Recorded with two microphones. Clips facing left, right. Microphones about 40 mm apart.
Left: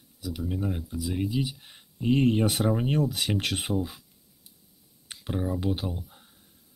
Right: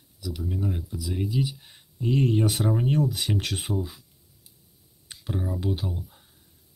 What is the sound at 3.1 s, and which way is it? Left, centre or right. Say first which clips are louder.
Speech: even; left.